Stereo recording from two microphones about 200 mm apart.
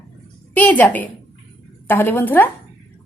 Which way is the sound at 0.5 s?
10° left (ahead or behind).